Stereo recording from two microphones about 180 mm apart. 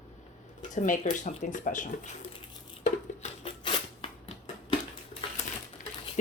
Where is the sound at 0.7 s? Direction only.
45° left (ahead or behind).